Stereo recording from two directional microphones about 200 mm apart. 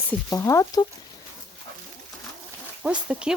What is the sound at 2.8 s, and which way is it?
Speech, 5° right (ahead or behind).